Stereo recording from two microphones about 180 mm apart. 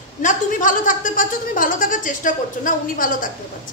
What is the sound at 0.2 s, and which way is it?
Speech, 45° left (ahead or behind).